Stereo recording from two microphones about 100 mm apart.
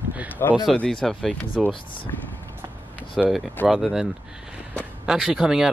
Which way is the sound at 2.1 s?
30° left (ahead or behind).